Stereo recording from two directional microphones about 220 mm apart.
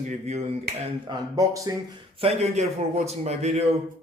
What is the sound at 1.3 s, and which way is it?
Speech, 15° right (ahead or behind).